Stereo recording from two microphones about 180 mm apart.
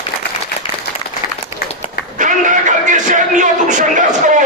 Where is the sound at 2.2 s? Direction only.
45° right (ahead or behind).